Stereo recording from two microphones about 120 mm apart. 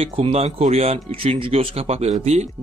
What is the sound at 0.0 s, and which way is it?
Speech, 55° right (ahead or behind).